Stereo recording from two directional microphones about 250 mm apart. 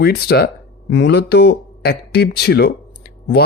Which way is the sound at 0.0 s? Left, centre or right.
Left.